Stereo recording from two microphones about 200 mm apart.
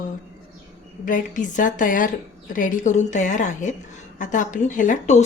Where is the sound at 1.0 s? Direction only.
40° left (ahead or behind).